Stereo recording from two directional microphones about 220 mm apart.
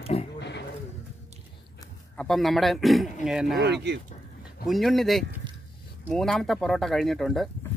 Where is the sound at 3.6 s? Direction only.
50° right (ahead or behind).